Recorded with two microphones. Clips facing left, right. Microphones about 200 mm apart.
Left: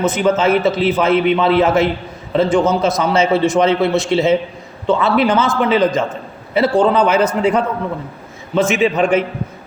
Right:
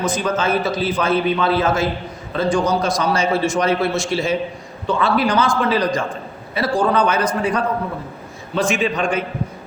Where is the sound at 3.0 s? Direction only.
20° left (ahead or behind).